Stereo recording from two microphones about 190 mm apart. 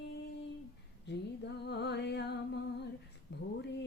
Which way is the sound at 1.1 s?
60° left (ahead or behind).